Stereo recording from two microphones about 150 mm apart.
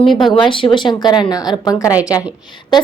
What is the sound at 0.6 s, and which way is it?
A woman's voice, 30° left (ahead or behind).